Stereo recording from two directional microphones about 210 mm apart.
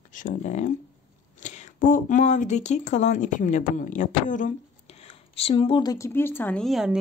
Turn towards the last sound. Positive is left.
turn(degrees=0)  # may be behind; listen again after turning